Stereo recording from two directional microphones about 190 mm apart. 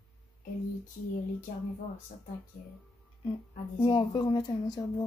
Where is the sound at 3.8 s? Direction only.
25° left (ahead or behind).